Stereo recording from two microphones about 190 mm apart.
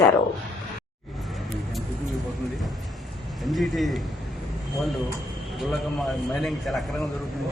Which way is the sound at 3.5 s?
Centre (ahead or behind).